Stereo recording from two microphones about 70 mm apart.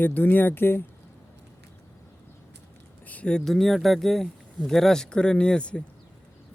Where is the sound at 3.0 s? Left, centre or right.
Left.